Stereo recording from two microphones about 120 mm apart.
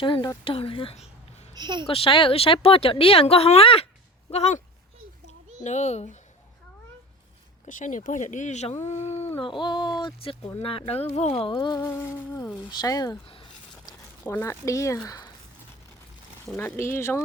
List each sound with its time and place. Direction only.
0.0 s speech: 45° left (ahead or behind)
1.5 s a woman's voice: 40° right (ahead or behind)
1.9 s speech: 50° left (ahead or behind)
4.3 s speech: 65° left (ahead or behind)
5.2 s a sound: 75° left (ahead or behind)
7.6 s speech: 90° left
8.8 s speech: 65° left (ahead or behind)
9.4 s a sound: 40° left (ahead or behind)
10.6 s speech: 50° left (ahead or behind)
11.5 s a sound: 35° left (ahead or behind)
14.3 s speech: 20° left (ahead or behind)
16.6 s speech: 20° left (ahead or behind)